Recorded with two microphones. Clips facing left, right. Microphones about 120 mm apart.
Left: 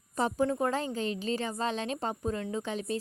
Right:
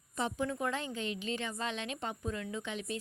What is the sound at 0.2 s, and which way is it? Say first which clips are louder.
A woman's voice: left 6 dB; 40° left (ahead or behind).